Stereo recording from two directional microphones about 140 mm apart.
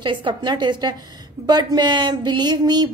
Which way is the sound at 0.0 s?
35° right (ahead or behind).